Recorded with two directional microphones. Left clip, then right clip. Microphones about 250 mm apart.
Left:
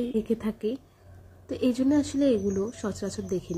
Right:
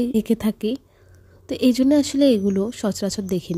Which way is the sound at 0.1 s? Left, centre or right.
Right.